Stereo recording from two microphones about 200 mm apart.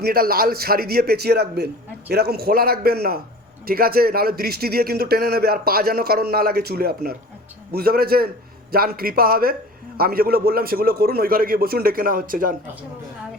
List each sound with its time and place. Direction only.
0.0 s a man's voice: 50° right (ahead or behind)